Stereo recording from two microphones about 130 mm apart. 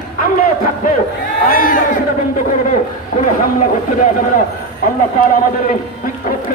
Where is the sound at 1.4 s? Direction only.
90° left.